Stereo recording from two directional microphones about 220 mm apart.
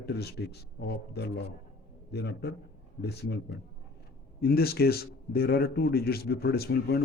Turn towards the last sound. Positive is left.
turn(degrees=45)  # may be behind; listen again after turning